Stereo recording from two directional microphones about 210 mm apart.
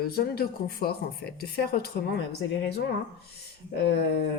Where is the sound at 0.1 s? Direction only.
45° left (ahead or behind).